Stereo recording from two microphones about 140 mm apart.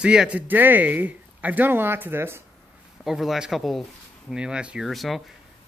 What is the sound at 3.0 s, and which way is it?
Speech, centre (ahead or behind).